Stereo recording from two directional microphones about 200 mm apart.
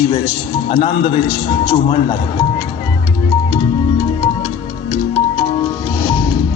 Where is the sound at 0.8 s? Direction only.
25° left (ahead or behind).